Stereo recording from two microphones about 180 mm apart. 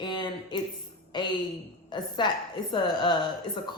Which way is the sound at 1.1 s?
25° left (ahead or behind).